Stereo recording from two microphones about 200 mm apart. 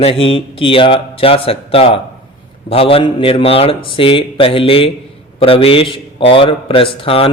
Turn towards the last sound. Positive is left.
turn(degrees=30)  # may be behind; listen again after turning